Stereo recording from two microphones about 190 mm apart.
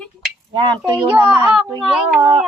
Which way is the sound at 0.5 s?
25° right (ahead or behind).